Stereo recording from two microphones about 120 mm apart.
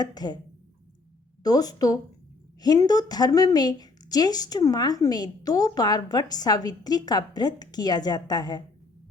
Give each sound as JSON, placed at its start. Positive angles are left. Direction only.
{"t": 0.0, "sound": "a woman's voice", "side_deg": 35}
{"t": 1.5, "sound": "a woman's voice", "side_deg": 30}